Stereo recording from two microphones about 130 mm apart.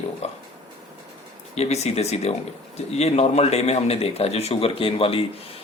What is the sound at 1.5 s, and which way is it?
A man's voice, 55° left (ahead or behind).